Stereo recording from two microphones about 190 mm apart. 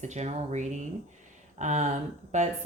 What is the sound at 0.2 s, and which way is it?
Speech, 35° right (ahead or behind).